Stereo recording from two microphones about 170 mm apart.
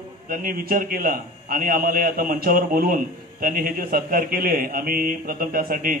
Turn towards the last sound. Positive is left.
turn(degrees=-55)  # may be behind; listen again after turning